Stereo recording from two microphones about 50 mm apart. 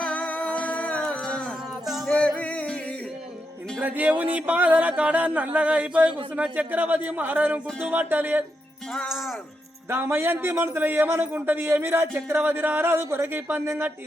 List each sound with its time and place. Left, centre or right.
0.0 s music: left
3.8 s speech: right
9.0 s speech: centre
9.9 s a man's voice: right
13.2 s speech: right